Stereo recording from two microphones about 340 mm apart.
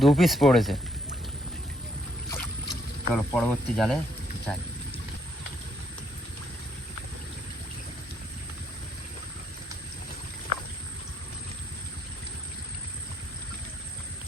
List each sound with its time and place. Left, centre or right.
0.0 s speech: centre
2.3 s rowboat: centre